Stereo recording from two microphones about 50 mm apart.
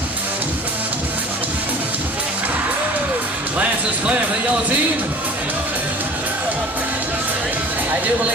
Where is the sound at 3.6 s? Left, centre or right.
Right.